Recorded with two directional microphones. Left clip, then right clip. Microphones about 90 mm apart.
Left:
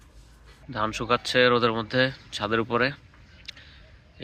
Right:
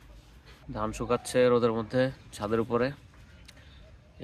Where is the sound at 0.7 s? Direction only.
10° right (ahead or behind).